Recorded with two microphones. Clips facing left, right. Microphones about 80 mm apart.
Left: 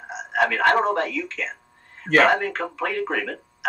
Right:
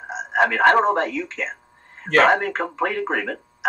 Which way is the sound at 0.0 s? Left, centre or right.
Right.